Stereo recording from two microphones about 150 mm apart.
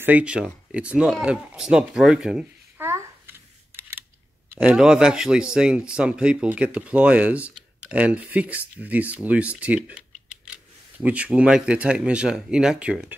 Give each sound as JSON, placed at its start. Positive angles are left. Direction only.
{"t": 0.0, "sound": "speech", "side_deg": -10}
{"t": 2.9, "sound": "a sound", "side_deg": -15}
{"t": 4.5, "sound": "a man's voice", "side_deg": -5}